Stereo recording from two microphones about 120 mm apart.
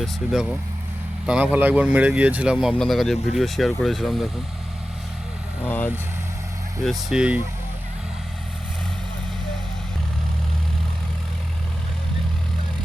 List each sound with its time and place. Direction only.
0.0 s speech: 5° right (ahead or behind)
5.6 s speech: 15° left (ahead or behind)
6.8 s speech: 5° right (ahead or behind)